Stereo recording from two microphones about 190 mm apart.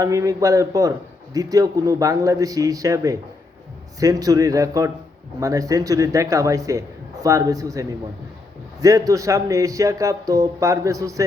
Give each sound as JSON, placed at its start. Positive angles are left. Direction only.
{"t": 0.0, "sound": "a man's voice", "side_deg": -15}